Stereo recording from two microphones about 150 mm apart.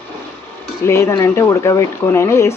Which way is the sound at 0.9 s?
20° left (ahead or behind).